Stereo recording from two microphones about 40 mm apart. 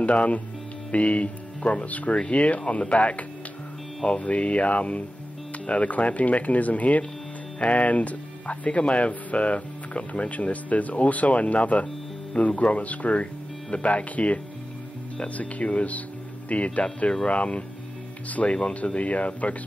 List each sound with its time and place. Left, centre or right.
0.0 s speech: left